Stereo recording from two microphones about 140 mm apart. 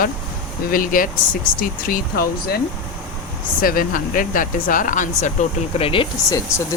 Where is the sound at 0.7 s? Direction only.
85° left.